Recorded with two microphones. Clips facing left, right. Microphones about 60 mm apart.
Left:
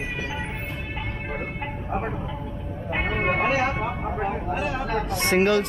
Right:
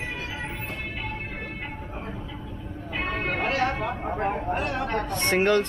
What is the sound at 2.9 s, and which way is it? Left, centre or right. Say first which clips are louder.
Vehicle: left 4 dB; left.